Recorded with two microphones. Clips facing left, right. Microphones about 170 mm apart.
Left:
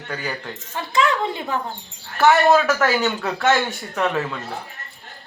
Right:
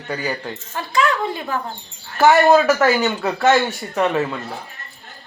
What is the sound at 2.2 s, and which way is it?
Speech, 10° right (ahead or behind).